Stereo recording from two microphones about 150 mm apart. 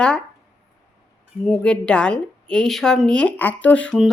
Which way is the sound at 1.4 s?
5° left (ahead or behind).